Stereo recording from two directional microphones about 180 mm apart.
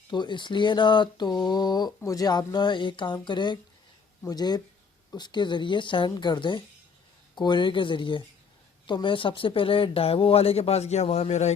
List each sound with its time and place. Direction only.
0.1 s speech: 25° left (ahead or behind)